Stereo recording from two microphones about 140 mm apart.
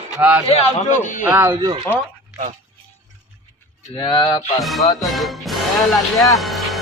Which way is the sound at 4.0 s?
35° left (ahead or behind).